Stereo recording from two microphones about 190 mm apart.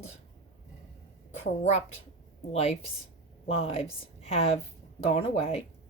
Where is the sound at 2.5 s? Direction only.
35° left (ahead or behind).